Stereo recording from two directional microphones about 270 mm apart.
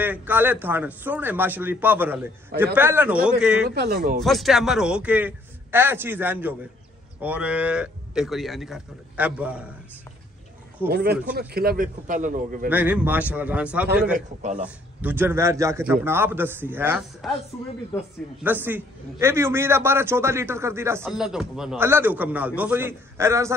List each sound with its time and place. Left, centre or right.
0.0 s a man's voice: centre
3.7 s a man's voice: right
4.2 s a man's voice: centre
10.9 s a man's voice: right
12.6 s a man's voice: centre
14.1 s a man's voice: right
14.6 s a man's voice: centre
18.4 s a man's voice: centre